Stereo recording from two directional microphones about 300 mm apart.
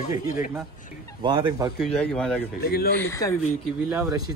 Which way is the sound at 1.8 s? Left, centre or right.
Centre.